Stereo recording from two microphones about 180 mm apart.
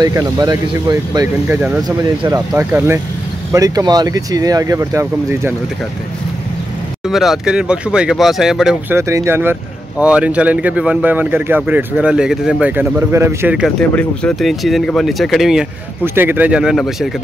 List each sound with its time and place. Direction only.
0.0 s speech: 20° right (ahead or behind)
7.1 s speech: centre (ahead or behind)
8.9 s speech: 15° right (ahead or behind)
13.7 s speech: 5° left (ahead or behind)